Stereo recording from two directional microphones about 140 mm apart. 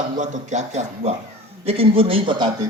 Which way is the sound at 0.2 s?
55° right (ahead or behind).